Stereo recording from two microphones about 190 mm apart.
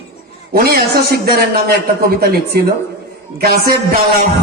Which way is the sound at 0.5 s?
55° right (ahead or behind).